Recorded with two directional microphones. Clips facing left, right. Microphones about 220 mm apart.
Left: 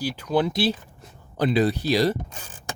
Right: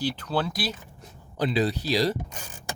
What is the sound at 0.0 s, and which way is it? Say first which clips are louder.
Speech: left 4 dB; 10° left (ahead or behind).